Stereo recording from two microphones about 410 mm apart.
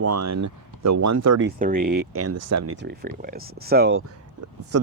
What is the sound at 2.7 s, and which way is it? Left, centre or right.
Speech, right.